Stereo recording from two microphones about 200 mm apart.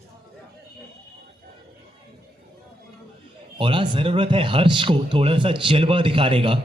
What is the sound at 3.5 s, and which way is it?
Speech, 25° right (ahead or behind).